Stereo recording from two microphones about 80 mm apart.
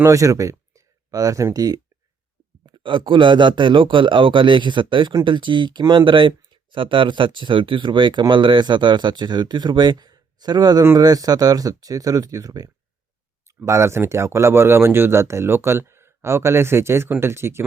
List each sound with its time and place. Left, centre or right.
0.0 s speech: right
2.6 s a man's voice: right
13.7 s speech: right